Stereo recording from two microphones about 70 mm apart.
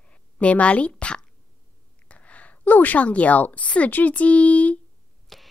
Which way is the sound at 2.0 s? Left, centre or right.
Centre.